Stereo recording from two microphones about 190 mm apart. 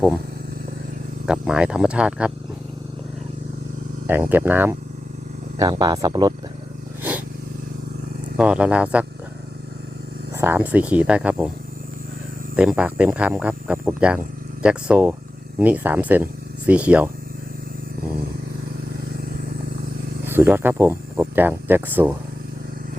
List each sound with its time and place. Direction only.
1.3 s speech: 5° right (ahead or behind)
4.0 s speech: 10° right (ahead or behind)
5.5 s speech: 20° right (ahead or behind)
8.4 s speech: 5° right (ahead or behind)
10.3 s speech: 10° right (ahead or behind)
12.5 s speech: 5° right (ahead or behind)
20.2 s speech: 10° right (ahead or behind)